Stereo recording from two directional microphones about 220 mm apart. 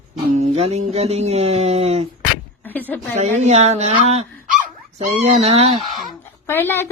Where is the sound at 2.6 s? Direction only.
10° left (ahead or behind).